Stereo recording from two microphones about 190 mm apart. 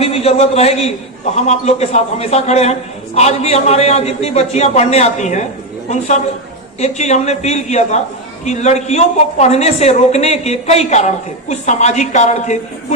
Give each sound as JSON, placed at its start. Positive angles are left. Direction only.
{"t": 0.0, "sound": "a man's voice", "side_deg": 30}
{"t": 6.7, "sound": "a woman's voice", "side_deg": 35}